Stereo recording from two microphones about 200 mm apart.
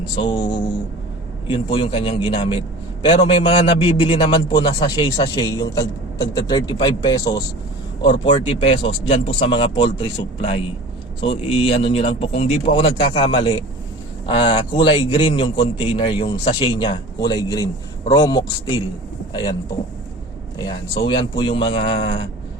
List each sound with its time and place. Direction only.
0.0 s a man's voice: 25° left (ahead or behind)
1.5 s a man's voice: 25° left (ahead or behind)
20.6 s a man's voice: 20° left (ahead or behind)